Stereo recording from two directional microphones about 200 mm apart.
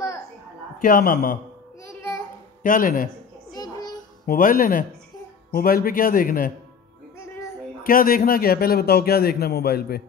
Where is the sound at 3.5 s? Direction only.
20° left (ahead or behind).